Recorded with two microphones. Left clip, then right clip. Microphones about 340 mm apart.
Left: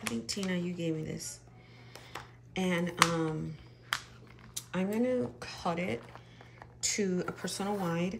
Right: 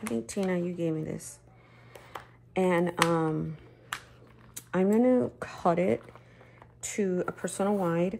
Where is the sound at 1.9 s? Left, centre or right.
Centre.